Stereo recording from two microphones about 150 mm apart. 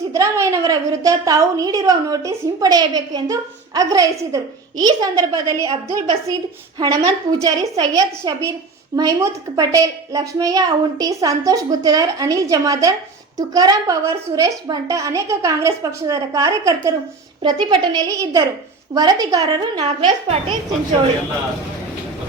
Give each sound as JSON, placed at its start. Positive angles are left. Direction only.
{"t": 0.1, "sound": "a woman's voice", "side_deg": -20}
{"t": 6.7, "sound": "a woman's voice", "side_deg": -25}
{"t": 19.8, "sound": "a woman's voice", "side_deg": -40}